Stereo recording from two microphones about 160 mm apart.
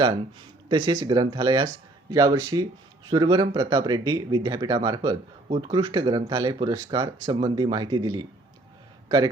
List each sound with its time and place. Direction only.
0.7 s a man's voice: 30° right (ahead or behind)